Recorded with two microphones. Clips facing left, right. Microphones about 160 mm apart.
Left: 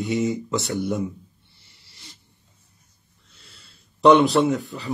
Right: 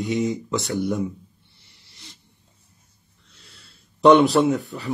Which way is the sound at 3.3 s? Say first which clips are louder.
Right 1 dB; centre (ahead or behind).